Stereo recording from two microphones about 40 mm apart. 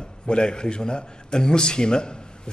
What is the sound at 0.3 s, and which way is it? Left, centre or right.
A man's voice, left.